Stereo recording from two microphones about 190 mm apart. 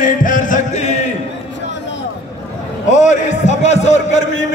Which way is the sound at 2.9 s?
40° left (ahead or behind).